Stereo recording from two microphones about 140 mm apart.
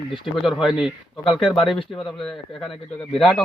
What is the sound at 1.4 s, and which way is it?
Speech, 40° left (ahead or behind).